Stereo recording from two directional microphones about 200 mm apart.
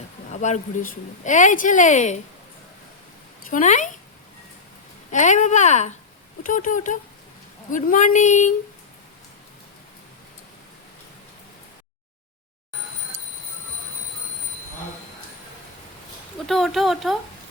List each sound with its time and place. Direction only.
0.3 s a woman's voice: 35° left (ahead or behind)
3.5 s a woman's voice: 35° left (ahead or behind)
5.1 s a woman's voice: 40° left (ahead or behind)
16.5 s speech: centre (ahead or behind)